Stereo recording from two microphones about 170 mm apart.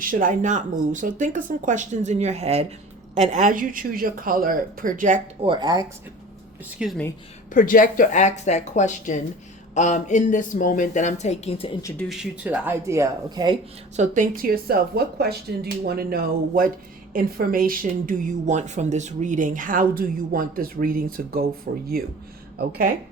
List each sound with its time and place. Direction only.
0.0 s speech: 55° right (ahead or behind)
5.4 s speech: 30° right (ahead or behind)
6.7 s speech: centre (ahead or behind)
7.5 s speech: 55° left (ahead or behind); by 11.7 s 35° left (ahead or behind)
11.8 s speech: 15° left (ahead or behind)
12.0 s speech: 5° right (ahead or behind); by 13.6 s 25° right (ahead or behind)
13.9 s speech: 45° right (ahead or behind)
21.7 s speech: 70° right (ahead or behind)